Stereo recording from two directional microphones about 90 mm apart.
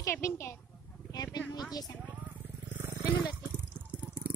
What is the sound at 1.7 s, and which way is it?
Speech, 45° left (ahead or behind).